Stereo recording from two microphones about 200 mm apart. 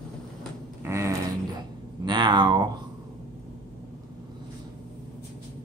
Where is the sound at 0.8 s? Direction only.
15° right (ahead or behind).